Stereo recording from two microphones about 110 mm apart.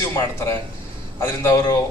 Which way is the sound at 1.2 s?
25° left (ahead or behind).